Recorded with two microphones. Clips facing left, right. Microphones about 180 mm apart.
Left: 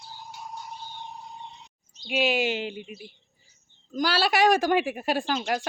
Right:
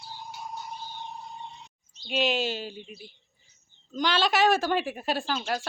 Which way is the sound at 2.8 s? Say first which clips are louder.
Left 3 dB; 5° left (ahead or behind).